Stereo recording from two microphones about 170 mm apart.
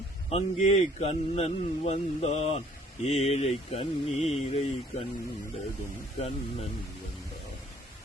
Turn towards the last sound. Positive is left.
turn(degrees=35)  # may be behind; listen again after turning